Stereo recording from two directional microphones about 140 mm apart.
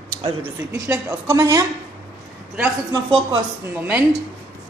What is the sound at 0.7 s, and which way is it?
Speech, 20° right (ahead or behind).